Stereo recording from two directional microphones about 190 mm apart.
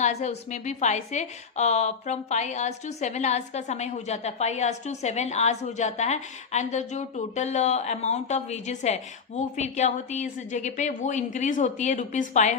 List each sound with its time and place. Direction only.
0.0 s a woman's voice: 35° left (ahead or behind)